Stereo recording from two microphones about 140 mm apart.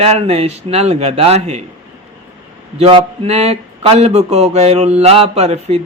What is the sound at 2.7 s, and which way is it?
Speech, 40° right (ahead or behind).